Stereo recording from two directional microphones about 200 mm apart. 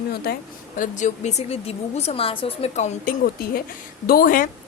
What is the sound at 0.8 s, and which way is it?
A woman's voice, 40° left (ahead or behind).